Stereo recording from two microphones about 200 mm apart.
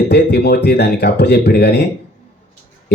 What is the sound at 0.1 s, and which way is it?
Speech, 55° left (ahead or behind).